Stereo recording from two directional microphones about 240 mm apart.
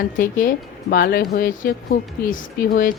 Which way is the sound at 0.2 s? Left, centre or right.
Left.